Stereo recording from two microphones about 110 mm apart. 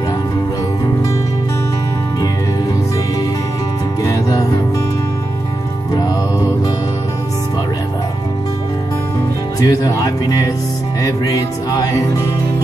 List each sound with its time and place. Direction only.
4.0 s music: 30° left (ahead or behind)
9.6 s music: 30° left (ahead or behind)